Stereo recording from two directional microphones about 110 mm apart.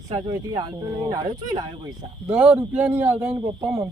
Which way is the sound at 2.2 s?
10° right (ahead or behind).